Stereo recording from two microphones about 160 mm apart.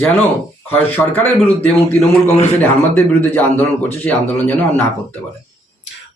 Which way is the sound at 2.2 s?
45° left (ahead or behind).